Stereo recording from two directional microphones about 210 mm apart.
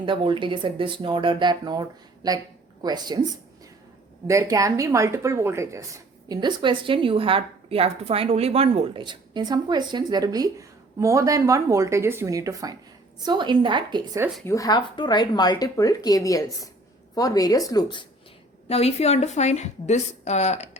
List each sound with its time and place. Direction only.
0.0 s speech: 25° right (ahead or behind)
4.3 s a woman's voice: 15° right (ahead or behind)
14.4 s a woman's voice: 15° left (ahead or behind); by 20.7 s 30° left (ahead or behind)